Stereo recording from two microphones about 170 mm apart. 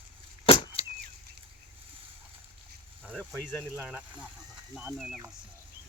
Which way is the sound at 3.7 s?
10° right (ahead or behind).